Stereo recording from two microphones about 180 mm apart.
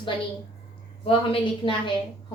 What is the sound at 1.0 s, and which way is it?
Speech, 30° left (ahead or behind).